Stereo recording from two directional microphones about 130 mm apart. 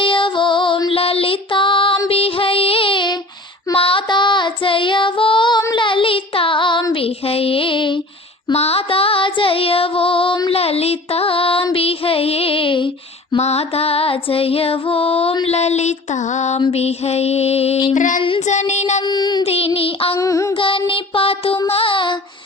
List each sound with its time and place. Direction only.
0.0 s music: 40° left (ahead or behind)
3.8 s child singing: 45° left (ahead or behind)
6.9 s a sound: 50° left (ahead or behind)
8.5 s music: 50° left (ahead or behind)
10.5 s music: 50° left (ahead or behind)
13.4 s music: 55° left (ahead or behind)
15.4 s a sound: 55° left (ahead or behind)
16.7 s music: 55° left (ahead or behind)
17.9 s female singing: 80° left
18.3 s a sound: 60° left (ahead or behind)
19.0 s child singing: 35° left (ahead or behind)
19.5 s music: 50° left (ahead or behind)
20.1 s child singing: 25° left (ahead or behind)
20.6 s child singing: 40° left (ahead or behind)